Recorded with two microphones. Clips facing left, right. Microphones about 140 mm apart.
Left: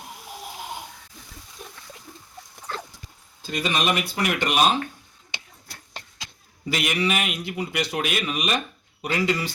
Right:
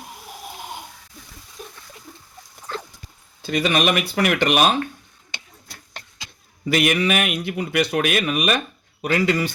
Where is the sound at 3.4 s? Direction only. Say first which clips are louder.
Right 5 dB; 70° right (ahead or behind).